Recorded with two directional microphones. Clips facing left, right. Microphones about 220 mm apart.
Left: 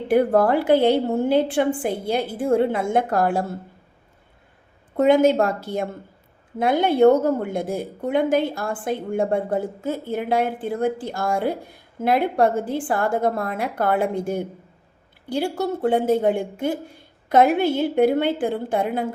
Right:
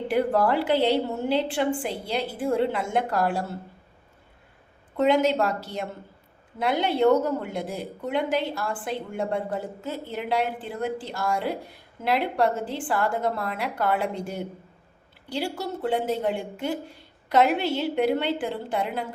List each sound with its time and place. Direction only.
0.1 s a woman's voice: 50° left (ahead or behind)
4.9 s a woman's voice: 50° left (ahead or behind)